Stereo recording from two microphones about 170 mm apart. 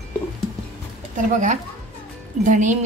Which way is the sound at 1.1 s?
50° right (ahead or behind).